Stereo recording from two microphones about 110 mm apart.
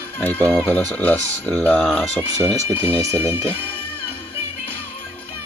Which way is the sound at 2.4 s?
25° right (ahead or behind).